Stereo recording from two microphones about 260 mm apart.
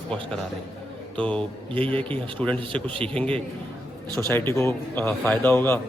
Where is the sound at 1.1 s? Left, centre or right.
Centre.